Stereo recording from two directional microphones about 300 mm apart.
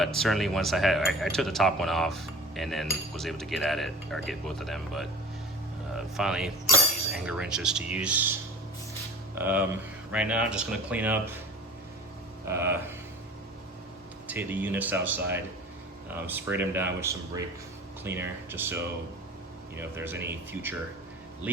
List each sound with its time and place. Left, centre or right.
0.0 s speech: centre
9.3 s speech: centre
12.5 s speech: centre
14.3 s speech: centre